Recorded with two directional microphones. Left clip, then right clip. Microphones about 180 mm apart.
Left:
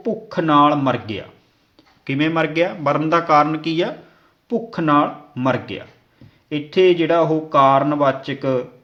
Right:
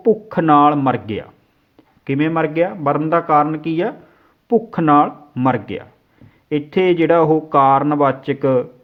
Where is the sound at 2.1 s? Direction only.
25° right (ahead or behind).